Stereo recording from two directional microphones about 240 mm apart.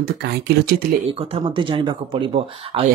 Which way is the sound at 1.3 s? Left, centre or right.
Right.